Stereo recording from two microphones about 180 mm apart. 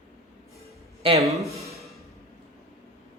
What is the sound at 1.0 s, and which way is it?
Speech, 30° right (ahead or behind).